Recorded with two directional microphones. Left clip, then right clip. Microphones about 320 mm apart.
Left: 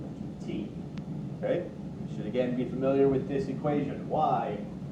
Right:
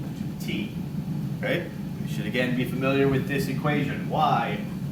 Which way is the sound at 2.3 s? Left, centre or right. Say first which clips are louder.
Right 3 dB; right.